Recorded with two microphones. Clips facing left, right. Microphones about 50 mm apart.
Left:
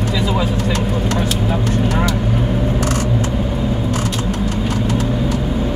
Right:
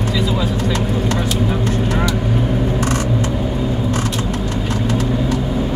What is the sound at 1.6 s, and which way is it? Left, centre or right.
Vehicle, right.